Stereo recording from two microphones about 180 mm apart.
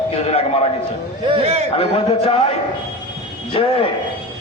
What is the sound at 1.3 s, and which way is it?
Speech, 35° right (ahead or behind).